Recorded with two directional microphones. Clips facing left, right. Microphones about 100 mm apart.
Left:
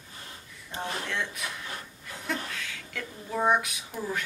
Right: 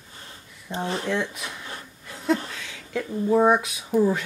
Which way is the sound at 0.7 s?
25° right (ahead or behind).